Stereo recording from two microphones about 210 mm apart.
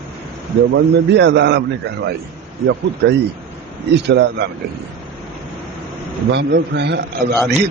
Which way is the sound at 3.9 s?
55° right (ahead or behind).